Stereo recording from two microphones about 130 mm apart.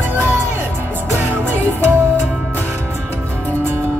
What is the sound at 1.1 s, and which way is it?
Music, 15° right (ahead or behind).